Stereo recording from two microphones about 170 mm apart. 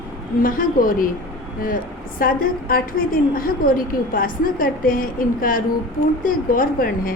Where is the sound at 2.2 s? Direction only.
60° left (ahead or behind).